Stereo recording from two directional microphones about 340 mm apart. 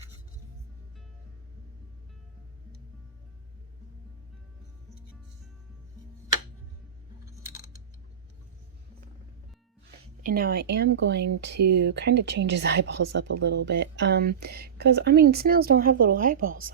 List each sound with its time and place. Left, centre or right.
10.2 s speech: right